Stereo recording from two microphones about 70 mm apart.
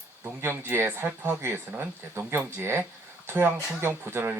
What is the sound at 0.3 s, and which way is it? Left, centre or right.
Speech, right.